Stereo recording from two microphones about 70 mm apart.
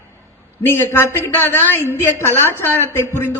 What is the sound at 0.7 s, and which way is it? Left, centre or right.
Speech, left.